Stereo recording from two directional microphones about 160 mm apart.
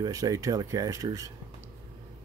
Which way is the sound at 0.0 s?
20° right (ahead or behind).